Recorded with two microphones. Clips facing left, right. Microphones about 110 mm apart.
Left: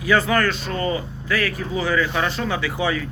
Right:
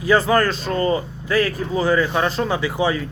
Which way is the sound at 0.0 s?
35° right (ahead or behind).